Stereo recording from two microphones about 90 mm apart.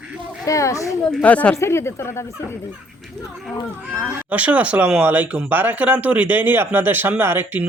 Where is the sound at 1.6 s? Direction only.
30° left (ahead or behind).